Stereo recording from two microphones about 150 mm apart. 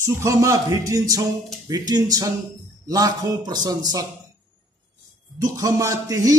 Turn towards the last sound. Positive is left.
turn(degrees=-25)  # may be behind; listen again after turning